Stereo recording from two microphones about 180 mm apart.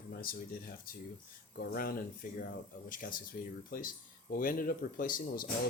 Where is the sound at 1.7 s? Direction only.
55° left (ahead or behind).